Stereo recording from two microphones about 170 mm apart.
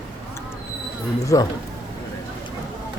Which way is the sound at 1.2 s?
20° left (ahead or behind).